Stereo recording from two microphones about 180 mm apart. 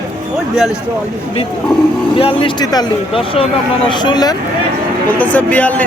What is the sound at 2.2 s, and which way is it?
Speech, 30° left (ahead or behind).